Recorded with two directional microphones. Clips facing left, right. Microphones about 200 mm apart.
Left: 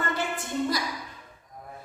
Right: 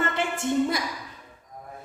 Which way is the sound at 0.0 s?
25° right (ahead or behind).